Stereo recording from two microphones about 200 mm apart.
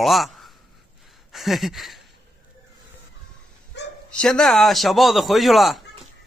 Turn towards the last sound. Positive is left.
turn(degrees=0)  # may be behind; listen again after turning